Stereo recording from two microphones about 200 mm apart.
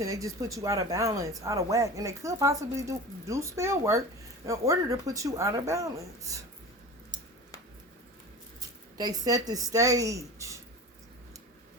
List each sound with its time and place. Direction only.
0.0 s speech: 15° right (ahead or behind)
9.0 s speech: 20° right (ahead or behind)